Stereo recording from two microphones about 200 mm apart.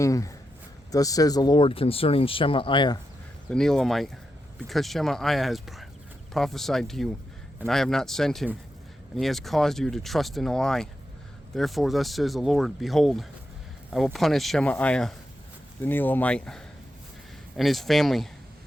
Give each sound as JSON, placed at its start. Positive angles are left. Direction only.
{"t": 0.0, "sound": "speech", "side_deg": 15}
{"t": 3.5, "sound": "speech", "side_deg": 5}